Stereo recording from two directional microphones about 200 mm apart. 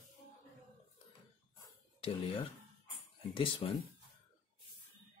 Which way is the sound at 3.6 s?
25° left (ahead or behind).